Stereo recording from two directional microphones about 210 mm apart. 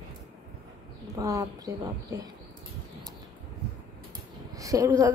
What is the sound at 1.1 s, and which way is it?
Speech, 15° right (ahead or behind).